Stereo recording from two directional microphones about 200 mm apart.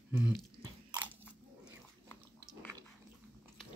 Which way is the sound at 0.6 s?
20° right (ahead or behind).